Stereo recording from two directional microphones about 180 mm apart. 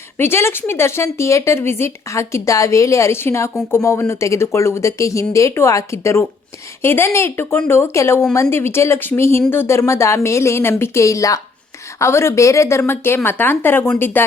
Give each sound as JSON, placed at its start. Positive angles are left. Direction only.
{"t": 0.2, "sound": "speech", "side_deg": 15}